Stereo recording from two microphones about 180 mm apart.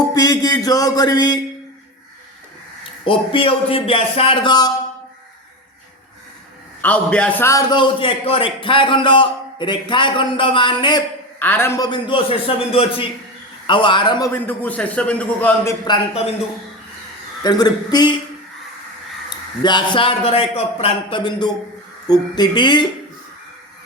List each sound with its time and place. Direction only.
0.1 s speech: 20° left (ahead or behind)
3.0 s a man's voice: 30° left (ahead or behind)
6.8 s a man's voice: 5° left (ahead or behind); by 11.0 s 25° left (ahead or behind)
11.3 s a man's voice: 10° left (ahead or behind)
11.9 s a man's voice: 30° left (ahead or behind); by 15.7 s 10° left (ahead or behind)
17.4 s a man's voice: 20° left (ahead or behind)
19.6 s a man's voice: 25° left (ahead or behind)